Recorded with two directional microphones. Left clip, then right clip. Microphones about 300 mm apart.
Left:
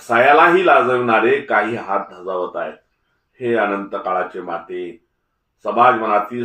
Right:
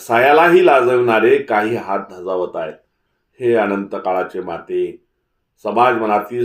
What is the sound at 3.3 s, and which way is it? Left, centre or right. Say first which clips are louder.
Speech: right 2 dB; right.